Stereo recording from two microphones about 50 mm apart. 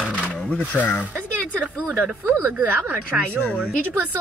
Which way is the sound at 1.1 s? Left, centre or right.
Right.